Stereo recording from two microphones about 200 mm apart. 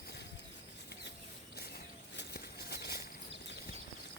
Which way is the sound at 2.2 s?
50° left (ahead or behind).